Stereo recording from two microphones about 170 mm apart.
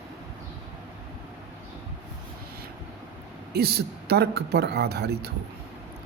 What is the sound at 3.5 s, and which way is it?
A woman's voice, 70° right (ahead or behind).